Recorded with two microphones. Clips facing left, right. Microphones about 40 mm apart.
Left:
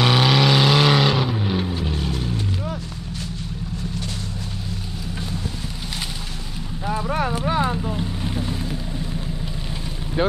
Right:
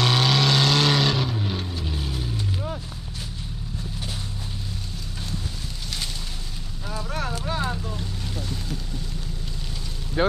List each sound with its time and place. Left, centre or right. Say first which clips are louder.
0.0 s vehicle: left 4 dB; centre
2.0 s vehicle: left 5 dB; centre
6.9 s boat: left 7 dB; left